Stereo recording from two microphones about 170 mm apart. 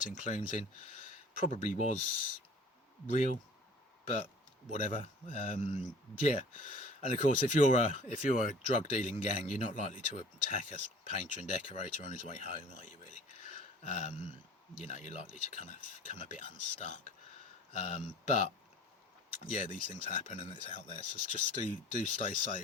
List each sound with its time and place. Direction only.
0.2 s speech: 45° left (ahead or behind)
3.1 s speech: 45° left (ahead or behind)
4.7 s speech: 45° left (ahead or behind)